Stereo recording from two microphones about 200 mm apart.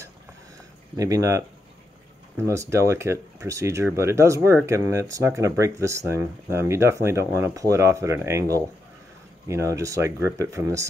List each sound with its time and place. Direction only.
0.9 s speech: 15° right (ahead or behind)